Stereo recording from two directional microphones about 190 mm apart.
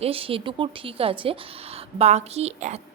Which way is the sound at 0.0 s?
30° right (ahead or behind).